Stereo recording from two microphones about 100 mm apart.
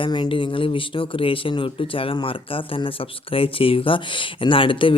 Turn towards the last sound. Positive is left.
turn(degrees=60)  # may be behind; listen again after turning